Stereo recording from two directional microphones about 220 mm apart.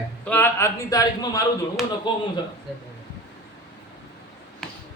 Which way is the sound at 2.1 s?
20° left (ahead or behind).